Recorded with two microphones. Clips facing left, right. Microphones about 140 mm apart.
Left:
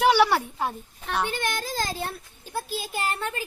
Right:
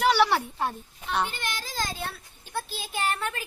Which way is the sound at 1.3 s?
55° left (ahead or behind).